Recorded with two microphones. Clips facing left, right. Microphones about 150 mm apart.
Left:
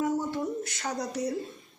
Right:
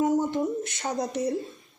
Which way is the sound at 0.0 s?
20° right (ahead or behind).